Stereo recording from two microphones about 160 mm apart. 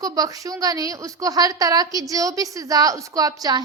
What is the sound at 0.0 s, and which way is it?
A woman's voice, 20° right (ahead or behind).